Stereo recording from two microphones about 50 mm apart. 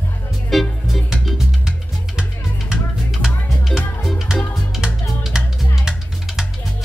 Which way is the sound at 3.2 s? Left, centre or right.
Centre.